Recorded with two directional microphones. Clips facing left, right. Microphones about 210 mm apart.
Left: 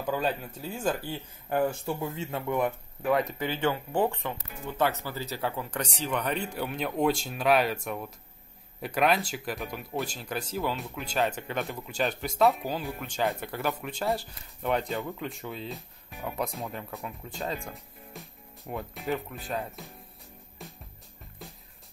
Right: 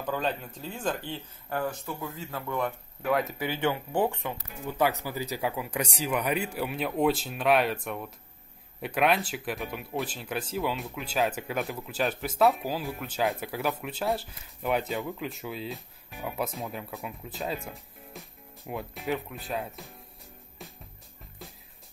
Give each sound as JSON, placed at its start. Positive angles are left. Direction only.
{"t": 0.0, "sound": "speech", "side_deg": 10}
{"t": 1.5, "sound": "speech", "side_deg": 25}
{"t": 3.0, "sound": "speech", "side_deg": 0}